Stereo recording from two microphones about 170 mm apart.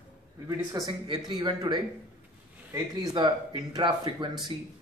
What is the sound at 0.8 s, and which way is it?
Speech, 25° right (ahead or behind).